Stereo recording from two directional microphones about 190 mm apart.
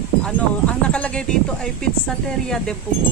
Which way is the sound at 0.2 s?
5° left (ahead or behind).